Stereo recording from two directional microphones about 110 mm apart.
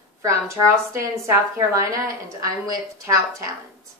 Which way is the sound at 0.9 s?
25° right (ahead or behind).